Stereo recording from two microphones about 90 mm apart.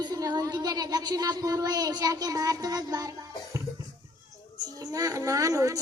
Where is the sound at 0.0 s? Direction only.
45° right (ahead or behind).